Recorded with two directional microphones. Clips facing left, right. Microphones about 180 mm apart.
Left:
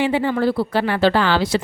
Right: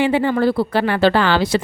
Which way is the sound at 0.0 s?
60° right (ahead or behind).